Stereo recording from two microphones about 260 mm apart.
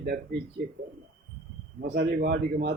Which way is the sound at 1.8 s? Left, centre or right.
Right.